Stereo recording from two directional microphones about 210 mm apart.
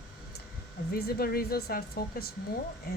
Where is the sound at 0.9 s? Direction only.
45° left (ahead or behind).